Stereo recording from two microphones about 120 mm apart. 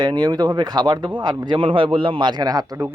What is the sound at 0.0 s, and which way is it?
A man's voice, 35° right (ahead or behind).